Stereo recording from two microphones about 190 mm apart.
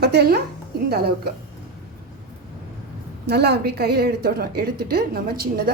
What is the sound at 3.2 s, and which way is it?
A woman's voice, 60° right (ahead or behind).